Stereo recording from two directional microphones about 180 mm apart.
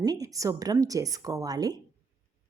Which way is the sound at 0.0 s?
20° right (ahead or behind).